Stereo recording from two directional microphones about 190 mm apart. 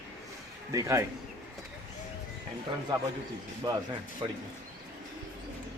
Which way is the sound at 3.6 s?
25° right (ahead or behind).